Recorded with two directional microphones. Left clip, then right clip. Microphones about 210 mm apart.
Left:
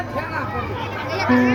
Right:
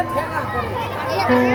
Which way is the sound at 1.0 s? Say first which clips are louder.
Right 3 dB; 35° right (ahead or behind).